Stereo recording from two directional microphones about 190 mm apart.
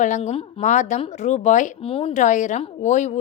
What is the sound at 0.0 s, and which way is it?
A woman's voice, 40° left (ahead or behind).